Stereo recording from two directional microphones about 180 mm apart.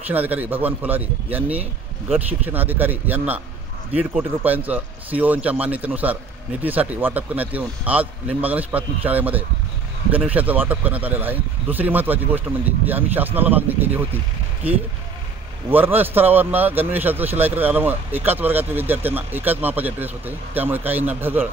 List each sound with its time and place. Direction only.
0.1 s a man's voice: 10° right (ahead or behind)
15.7 s a man's voice: 10° right (ahead or behind)